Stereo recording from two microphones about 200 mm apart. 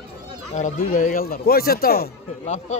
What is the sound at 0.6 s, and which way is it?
Speech, 40° left (ahead or behind).